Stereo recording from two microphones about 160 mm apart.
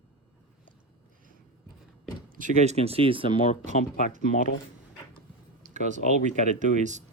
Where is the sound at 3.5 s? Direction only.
55° left (ahead or behind).